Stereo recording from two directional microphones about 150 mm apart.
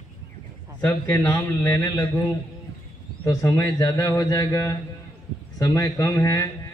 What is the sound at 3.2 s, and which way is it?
A man's voice, 15° left (ahead or behind).